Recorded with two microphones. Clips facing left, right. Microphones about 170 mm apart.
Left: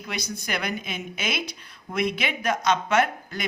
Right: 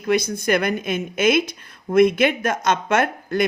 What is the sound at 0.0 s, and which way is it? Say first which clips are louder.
A woman's voice: right 13 dB; 50° right (ahead or behind).